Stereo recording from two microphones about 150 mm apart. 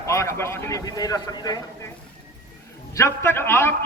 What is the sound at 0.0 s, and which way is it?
A man's voice, 20° left (ahead or behind).